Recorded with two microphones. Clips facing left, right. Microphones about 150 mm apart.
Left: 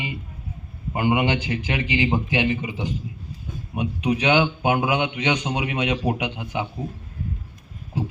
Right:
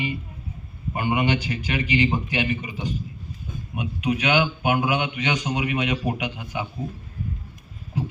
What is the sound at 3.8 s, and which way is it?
A man's voice, 30° left (ahead or behind).